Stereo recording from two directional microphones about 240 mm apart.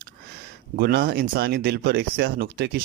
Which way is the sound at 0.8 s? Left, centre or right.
Right.